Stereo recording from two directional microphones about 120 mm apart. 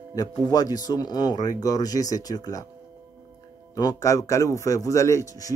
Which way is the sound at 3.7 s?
30° left (ahead or behind).